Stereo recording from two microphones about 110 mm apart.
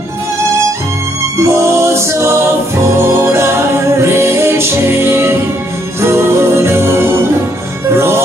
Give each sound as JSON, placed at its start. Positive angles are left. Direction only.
{"t": 1.4, "sound": "music", "side_deg": -25}